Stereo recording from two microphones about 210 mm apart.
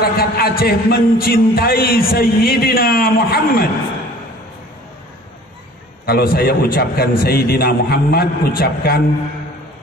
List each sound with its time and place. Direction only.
0.0 s a man's voice: 45° left (ahead or behind)
6.0 s a man's voice: 45° left (ahead or behind)